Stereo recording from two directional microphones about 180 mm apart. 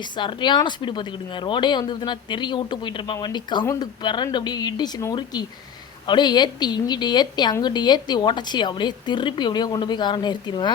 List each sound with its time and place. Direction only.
0.2 s speech: 25° left (ahead or behind)